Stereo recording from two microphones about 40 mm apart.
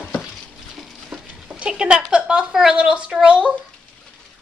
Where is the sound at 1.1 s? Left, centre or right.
Centre.